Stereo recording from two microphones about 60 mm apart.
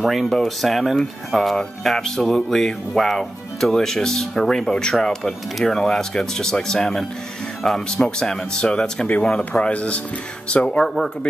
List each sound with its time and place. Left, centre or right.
0.0 s speech: centre